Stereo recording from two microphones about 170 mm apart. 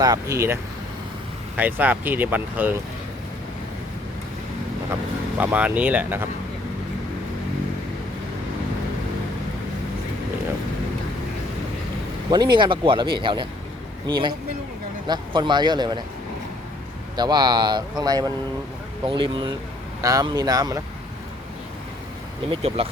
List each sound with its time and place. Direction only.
0.0 s speech: 20° right (ahead or behind)
5.4 s speech: 10° right (ahead or behind)
12.3 s speech: 25° right (ahead or behind)
17.2 s speech: 25° right (ahead or behind)
22.4 s speech: 35° right (ahead or behind)